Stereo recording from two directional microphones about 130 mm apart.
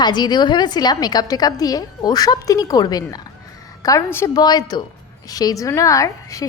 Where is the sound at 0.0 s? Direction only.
35° left (ahead or behind).